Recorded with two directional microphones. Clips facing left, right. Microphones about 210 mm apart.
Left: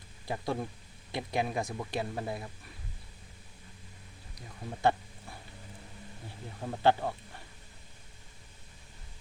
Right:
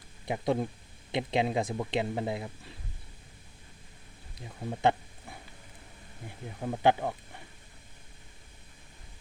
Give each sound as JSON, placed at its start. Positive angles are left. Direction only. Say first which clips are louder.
{"t": 0.3, "sound": "speech", "louder": "right 5 dB", "side_deg": -20}
{"t": 4.4, "sound": "speech", "louder": "right 5 dB", "side_deg": -20}